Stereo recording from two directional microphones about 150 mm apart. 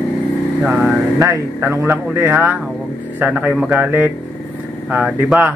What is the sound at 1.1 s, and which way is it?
A man's voice, 20° right (ahead or behind).